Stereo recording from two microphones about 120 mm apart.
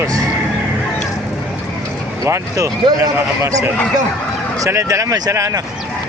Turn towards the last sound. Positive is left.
turn(degrees=-30)  # may be behind; listen again after turning